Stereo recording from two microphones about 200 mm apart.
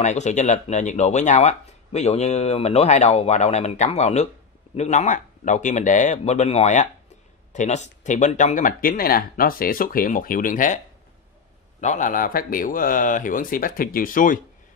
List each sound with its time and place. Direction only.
0.0 s speech: 35° left (ahead or behind)
11.8 s speech: 40° left (ahead or behind)